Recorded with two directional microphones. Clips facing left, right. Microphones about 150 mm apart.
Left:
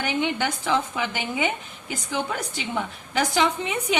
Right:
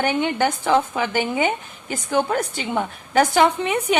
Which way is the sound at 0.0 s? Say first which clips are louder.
Right 5 dB; 50° right (ahead or behind).